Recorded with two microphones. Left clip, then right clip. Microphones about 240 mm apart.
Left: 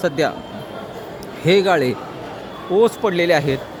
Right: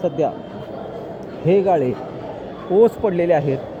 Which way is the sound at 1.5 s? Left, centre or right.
Centre.